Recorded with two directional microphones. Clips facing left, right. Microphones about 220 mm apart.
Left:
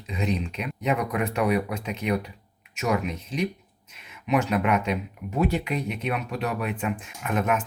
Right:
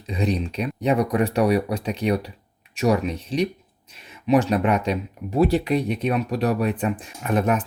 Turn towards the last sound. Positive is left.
turn(degrees=-35)  # may be behind; listen again after turning